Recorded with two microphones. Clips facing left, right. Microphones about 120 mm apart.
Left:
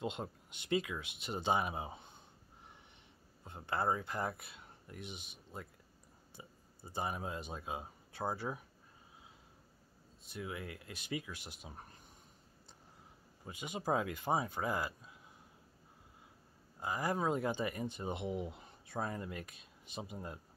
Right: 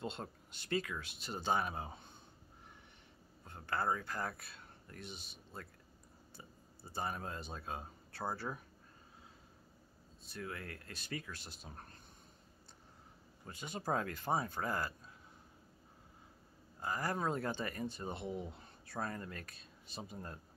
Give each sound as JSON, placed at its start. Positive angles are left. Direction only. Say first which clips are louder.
{"t": 0.0, "sound": "speech", "louder": "left 3 dB", "side_deg": 15}
{"t": 3.4, "sound": "speech", "louder": "left 2 dB", "side_deg": 20}
{"t": 10.2, "sound": "speech", "louder": "left 2 dB", "side_deg": 15}
{"t": 13.5, "sound": "speech", "louder": "left 2 dB", "side_deg": 15}
{"t": 16.8, "sound": "speech", "louder": "left 2 dB", "side_deg": 15}